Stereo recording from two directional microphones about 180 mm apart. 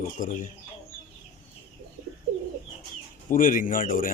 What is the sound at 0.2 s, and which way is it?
Speech, 45° left (ahead or behind).